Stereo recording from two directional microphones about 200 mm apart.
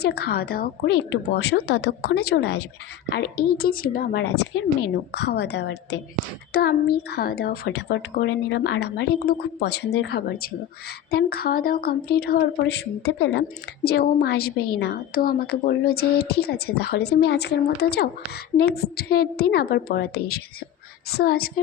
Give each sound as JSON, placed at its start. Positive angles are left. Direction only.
{"t": 0.0, "sound": "a woman's voice", "side_deg": 55}